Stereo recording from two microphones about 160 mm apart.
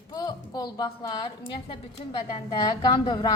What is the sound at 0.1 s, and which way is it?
A woman's voice, 25° left (ahead or behind).